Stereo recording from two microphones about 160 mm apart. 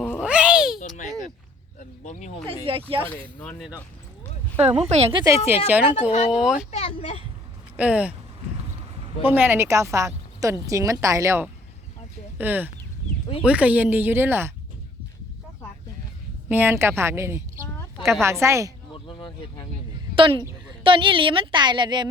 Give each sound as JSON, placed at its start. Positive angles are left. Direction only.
{"t": 0.2, "sound": "cat", "side_deg": -5}
{"t": 2.0, "sound": "speech", "side_deg": 45}
{"t": 2.6, "sound": "a woman's voice", "side_deg": -35}
{"t": 4.5, "sound": "a woman's voice", "side_deg": -40}
{"t": 5.6, "sound": "a woman's voice", "side_deg": -10}
{"t": 5.9, "sound": "speech", "side_deg": 40}
{"t": 6.3, "sound": "speech", "side_deg": -5}
{"t": 6.7, "sound": "speech", "side_deg": 40}
{"t": 7.8, "sound": "a woman's voice", "side_deg": -10}
{"t": 9.2, "sound": "a woman's voice", "side_deg": -10}
{"t": 16.5, "sound": "a woman's voice", "side_deg": -15}
{"t": 19.0, "sound": "vehicle", "side_deg": 30}
{"t": 20.1, "sound": "a woman's voice", "side_deg": -35}